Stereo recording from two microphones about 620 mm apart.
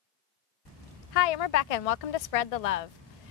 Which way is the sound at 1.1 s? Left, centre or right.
Left.